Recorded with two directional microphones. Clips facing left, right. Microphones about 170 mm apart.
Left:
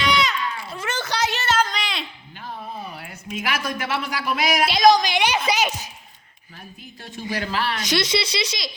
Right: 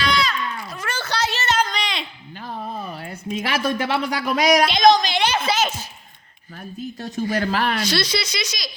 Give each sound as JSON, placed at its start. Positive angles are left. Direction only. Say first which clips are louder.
{"t": 0.0, "sound": "a sound", "louder": "even", "side_deg": 20}
{"t": 2.9, "sound": "a woman's voice", "louder": "right 5 dB", "side_deg": -35}
{"t": 4.6, "sound": "a woman's voice", "louder": "right 1 dB", "side_deg": 5}
{"t": 7.0, "sound": "speech", "louder": "right 5 dB", "side_deg": -45}
{"t": 7.8, "sound": "speech", "louder": "even", "side_deg": 20}